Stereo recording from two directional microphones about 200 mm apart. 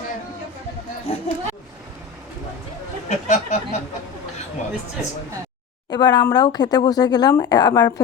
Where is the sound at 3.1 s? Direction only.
35° left (ahead or behind).